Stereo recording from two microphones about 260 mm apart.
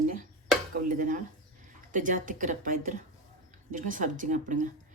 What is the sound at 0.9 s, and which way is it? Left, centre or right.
Dishes, right.